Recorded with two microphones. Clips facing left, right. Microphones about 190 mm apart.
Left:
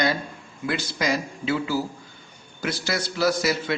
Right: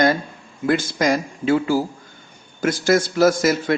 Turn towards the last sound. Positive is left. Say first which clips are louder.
# right 6 dB
turn(degrees=-45)  # may be behind; listen again after turning